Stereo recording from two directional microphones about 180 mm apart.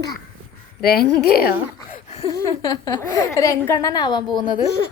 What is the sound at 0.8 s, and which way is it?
Speech, 60° left (ahead or behind).